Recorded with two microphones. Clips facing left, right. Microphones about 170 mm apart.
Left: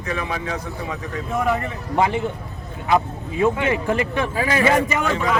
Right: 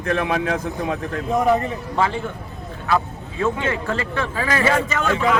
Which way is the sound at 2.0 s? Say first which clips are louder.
Left 3 dB; 20° left (ahead or behind).